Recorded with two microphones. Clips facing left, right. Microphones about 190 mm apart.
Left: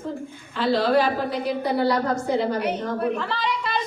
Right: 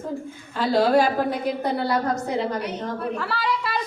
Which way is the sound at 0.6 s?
45° right (ahead or behind).